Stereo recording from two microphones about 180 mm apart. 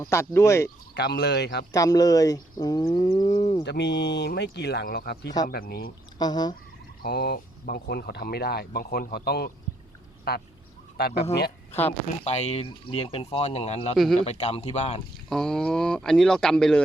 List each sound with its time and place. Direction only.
0.0 s speech: 15° left (ahead or behind)
0.9 s speech: 70° left (ahead or behind)
1.7 s speech: 20° left (ahead or behind)
3.6 s speech: 70° left (ahead or behind)
6.1 s speech: 20° left (ahead or behind)
7.0 s speech: 60° left (ahead or behind)
12.2 s speech: 35° left (ahead or behind)
13.9 s speech: centre (ahead or behind)
14.3 s speech: 35° left (ahead or behind)
15.3 s speech: 5° left (ahead or behind)